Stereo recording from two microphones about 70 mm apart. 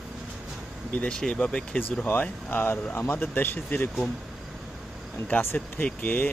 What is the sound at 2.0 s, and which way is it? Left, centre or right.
Speech, left.